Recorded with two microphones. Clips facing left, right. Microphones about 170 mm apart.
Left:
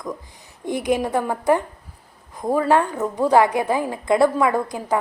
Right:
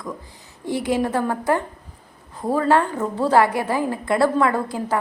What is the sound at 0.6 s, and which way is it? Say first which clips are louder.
A woman's voice: even; 20° left (ahead or behind).